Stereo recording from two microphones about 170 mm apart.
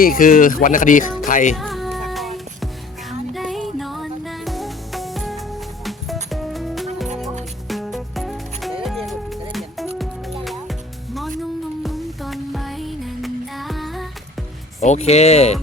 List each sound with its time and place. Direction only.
0.0 s speech: 55° left (ahead or behind)
1.2 s music: 50° left (ahead or behind)
1.5 s music: centre (ahead or behind)
14.8 s speech: 40° left (ahead or behind)